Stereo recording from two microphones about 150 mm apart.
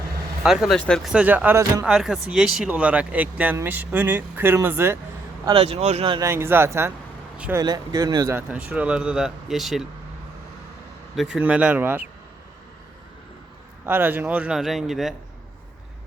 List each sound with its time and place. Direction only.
0.4 s speech: 5° right (ahead or behind)
1.8 s speech: 5° right (ahead or behind)
5.5 s speech: 40° right (ahead or behind)
6.1 s speech: 15° right (ahead or behind)
7.6 s speech: 25° right (ahead or behind)
8.7 s speech: 10° right (ahead or behind)
11.1 s speech: 5° right (ahead or behind)
13.8 s speech: 15° right (ahead or behind)